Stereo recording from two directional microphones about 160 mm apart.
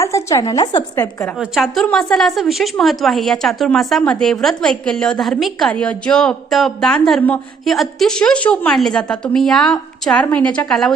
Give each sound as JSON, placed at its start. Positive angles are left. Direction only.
{"t": 0.0, "sound": "a woman's voice", "side_deg": 20}
{"t": 1.4, "sound": "a woman's voice", "side_deg": 0}